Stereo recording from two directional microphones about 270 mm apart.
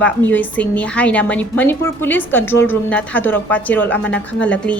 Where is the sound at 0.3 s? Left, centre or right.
Centre.